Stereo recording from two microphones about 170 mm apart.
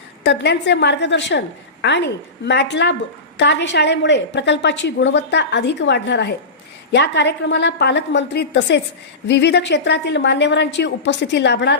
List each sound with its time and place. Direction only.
0.2 s a woman's voice: 90° left